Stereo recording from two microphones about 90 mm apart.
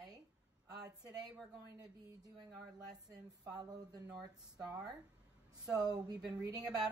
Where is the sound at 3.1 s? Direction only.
45° right (ahead or behind).